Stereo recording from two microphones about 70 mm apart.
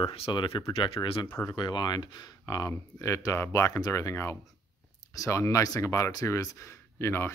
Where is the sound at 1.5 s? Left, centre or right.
Left.